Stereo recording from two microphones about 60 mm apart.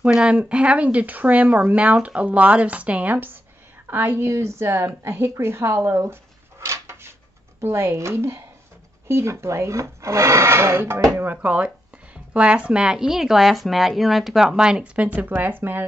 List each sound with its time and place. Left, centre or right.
0.0 s a woman's voice: centre; by 4.3 s right
4.3 s speech: right
6.6 s a sound: right
7.6 s speech: right
11.4 s speech: right
15.0 s speech: right